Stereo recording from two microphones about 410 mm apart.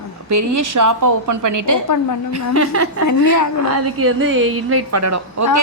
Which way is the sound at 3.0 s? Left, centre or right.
Left.